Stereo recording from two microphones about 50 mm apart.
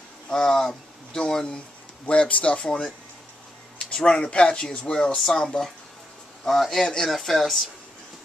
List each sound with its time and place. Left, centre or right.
0.3 s speech: centre
3.9 s speech: left
5.1 s speech: centre